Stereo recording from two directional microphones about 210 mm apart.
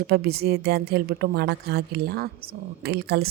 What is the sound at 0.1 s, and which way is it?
A woman's voice, 45° right (ahead or behind).